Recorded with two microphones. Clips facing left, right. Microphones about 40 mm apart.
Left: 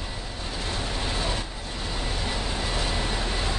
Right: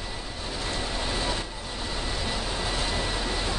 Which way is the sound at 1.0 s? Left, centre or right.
Left.